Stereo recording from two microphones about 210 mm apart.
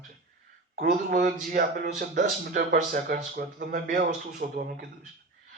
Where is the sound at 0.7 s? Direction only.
40° right (ahead or behind).